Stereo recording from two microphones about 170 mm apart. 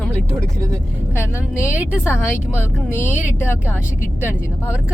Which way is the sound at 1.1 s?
15° left (ahead or behind).